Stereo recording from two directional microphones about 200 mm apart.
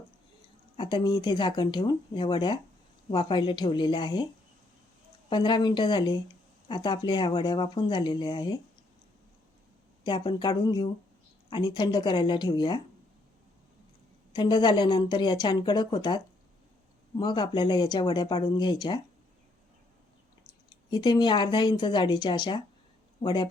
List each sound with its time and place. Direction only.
0.8 s speech: 25° left (ahead or behind)
5.3 s speech: 20° left (ahead or behind)
10.0 s speech: 25° left (ahead or behind)
14.3 s speech: 20° left (ahead or behind)
20.9 s speech: 20° left (ahead or behind)